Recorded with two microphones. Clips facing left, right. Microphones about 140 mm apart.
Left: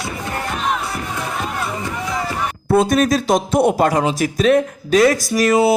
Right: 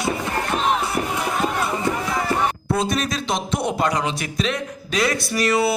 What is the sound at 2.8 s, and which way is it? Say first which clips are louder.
Speech: left 10 dB; 50° left (ahead or behind).